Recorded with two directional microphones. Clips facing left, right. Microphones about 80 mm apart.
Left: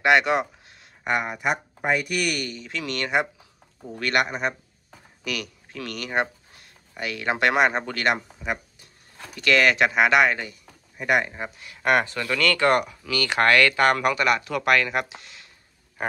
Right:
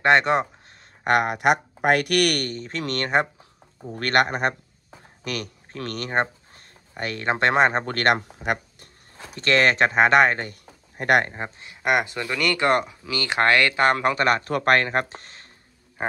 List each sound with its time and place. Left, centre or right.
0.0 s speech: right
1.0 s speech: right
7.8 s speech: right
9.3 s speech: right
10.6 s a sound: right
11.3 s speech: right
14.1 s speech: right
16.0 s a sound: right